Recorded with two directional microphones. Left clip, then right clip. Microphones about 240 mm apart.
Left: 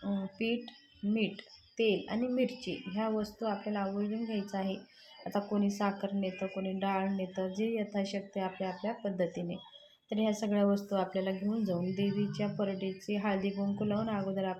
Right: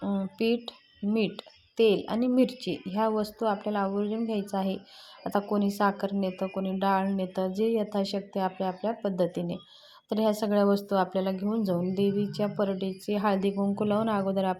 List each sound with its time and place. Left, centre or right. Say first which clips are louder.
0.3 s a woman's voice: right 8 dB; right